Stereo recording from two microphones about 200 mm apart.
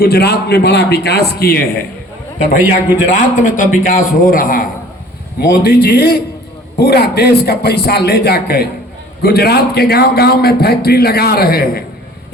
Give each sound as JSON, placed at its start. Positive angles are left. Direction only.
{"t": 0.0, "sound": "a man's voice", "side_deg": 55}
{"t": 3.1, "sound": "a man's voice", "side_deg": 40}